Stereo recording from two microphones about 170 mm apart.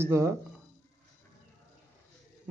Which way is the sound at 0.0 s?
15° right (ahead or behind).